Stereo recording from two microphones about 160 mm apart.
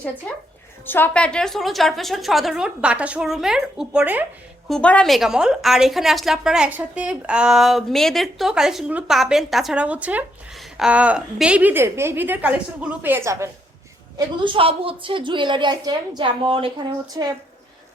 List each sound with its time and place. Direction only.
0.9 s a woman's voice: 10° left (ahead or behind); by 4.3 s 10° right (ahead or behind)
4.7 s a woman's voice: 5° left (ahead or behind); by 13.5 s 15° right (ahead or behind)
14.4 s a woman's voice: 35° right (ahead or behind)